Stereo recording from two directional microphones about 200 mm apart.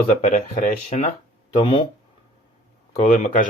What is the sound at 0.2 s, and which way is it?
Speech, 40° left (ahead or behind).